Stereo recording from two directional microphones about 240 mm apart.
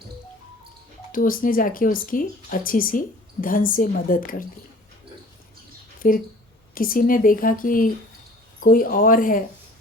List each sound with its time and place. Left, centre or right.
1.1 s speech: left
6.0 s speech: left